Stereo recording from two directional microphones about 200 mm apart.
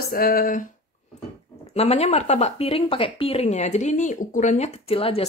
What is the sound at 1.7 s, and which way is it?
Speech, 30° left (ahead or behind).